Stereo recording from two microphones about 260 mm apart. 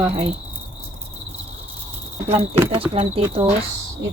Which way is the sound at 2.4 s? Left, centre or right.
Right.